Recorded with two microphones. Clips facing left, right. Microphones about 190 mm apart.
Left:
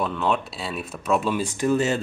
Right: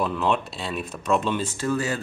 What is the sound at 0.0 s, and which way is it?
Speech, centre (ahead or behind).